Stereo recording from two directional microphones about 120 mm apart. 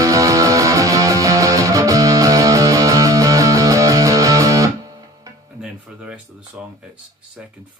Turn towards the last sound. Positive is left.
turn(degrees=-10)  # may be behind; listen again after turning